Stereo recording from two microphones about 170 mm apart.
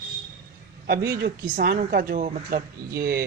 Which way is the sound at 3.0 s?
65° right (ahead or behind).